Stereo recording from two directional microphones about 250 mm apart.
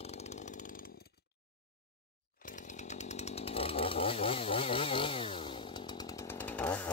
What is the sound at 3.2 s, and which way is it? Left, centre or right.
Chainsaw, left.